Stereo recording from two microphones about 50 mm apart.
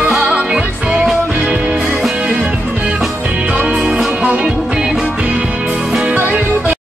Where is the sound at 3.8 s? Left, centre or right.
Centre.